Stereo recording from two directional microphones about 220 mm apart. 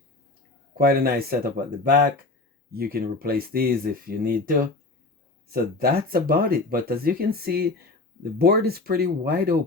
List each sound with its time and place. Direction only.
0.8 s speech: 45° right (ahead or behind)